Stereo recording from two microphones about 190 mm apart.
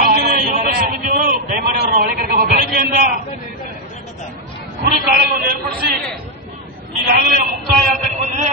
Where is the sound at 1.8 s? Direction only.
50° right (ahead or behind).